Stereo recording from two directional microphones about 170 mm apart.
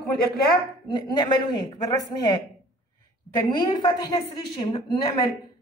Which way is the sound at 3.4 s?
25° left (ahead or behind).